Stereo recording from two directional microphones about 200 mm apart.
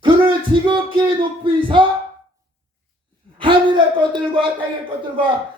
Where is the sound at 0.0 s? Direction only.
25° right (ahead or behind).